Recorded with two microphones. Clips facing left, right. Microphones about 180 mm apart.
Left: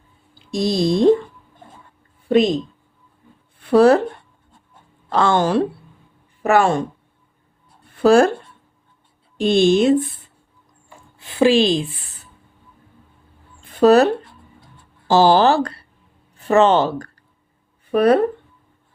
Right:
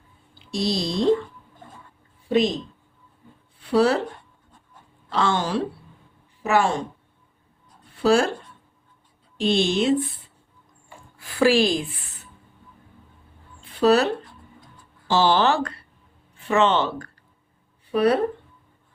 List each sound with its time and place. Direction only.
0.3 s speech: 50° left (ahead or behind)
2.3 s speech: 55° left (ahead or behind)
3.6 s speech: 55° left (ahead or behind)
5.0 s a woman's voice: 50° left (ahead or behind)
7.9 s speech: 50° left (ahead or behind)
9.4 s speech: 50° left (ahead or behind)
11.2 s speech: 25° left (ahead or behind)
13.6 s a sound: 45° left (ahead or behind)
15.0 s speech: 40° left (ahead or behind)
17.9 s speech: 50° left (ahead or behind)